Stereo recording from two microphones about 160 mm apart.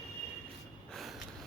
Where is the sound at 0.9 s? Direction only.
Centre (ahead or behind).